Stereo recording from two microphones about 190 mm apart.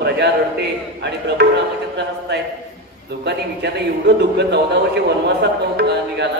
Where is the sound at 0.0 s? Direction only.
65° right (ahead or behind).